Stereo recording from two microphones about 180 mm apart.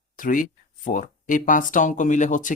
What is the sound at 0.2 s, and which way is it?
Speech, 50° left (ahead or behind).